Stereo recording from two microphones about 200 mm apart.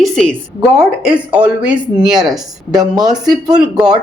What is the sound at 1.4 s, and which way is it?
Speech, 5° right (ahead or behind).